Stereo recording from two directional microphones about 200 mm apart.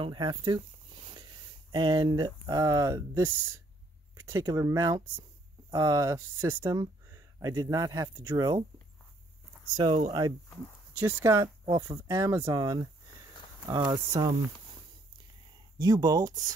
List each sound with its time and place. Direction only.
0.0 s speech: 25° right (ahead or behind)
9.8 s speech: 20° right (ahead or behind)
15.8 s speech: 20° right (ahead or behind)